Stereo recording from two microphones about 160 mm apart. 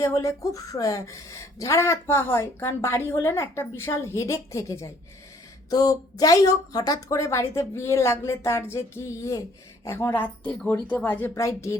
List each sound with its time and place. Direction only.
0.0 s speech: 20° left (ahead or behind)